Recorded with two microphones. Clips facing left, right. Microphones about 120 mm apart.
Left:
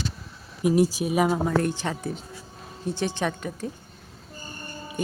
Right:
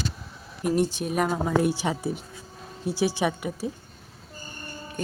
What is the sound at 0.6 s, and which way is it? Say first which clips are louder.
Speech: left 3 dB; 5° left (ahead or behind).